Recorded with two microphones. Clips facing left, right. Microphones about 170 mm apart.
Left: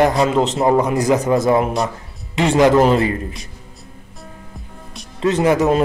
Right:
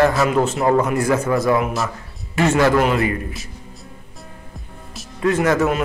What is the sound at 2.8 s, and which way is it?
Speech, 30° left (ahead or behind).